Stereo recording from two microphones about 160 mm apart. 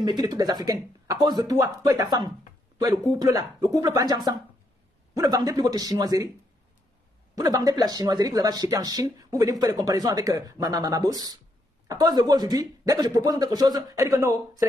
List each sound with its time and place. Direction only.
0.0 s speech: 25° right (ahead or behind)
7.3 s speech: 20° right (ahead or behind)